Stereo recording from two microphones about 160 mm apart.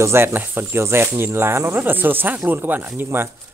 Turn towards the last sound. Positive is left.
turn(degrees=-15)  # may be behind; listen again after turning